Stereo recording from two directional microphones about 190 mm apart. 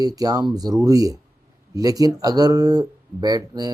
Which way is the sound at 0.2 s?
20° right (ahead or behind).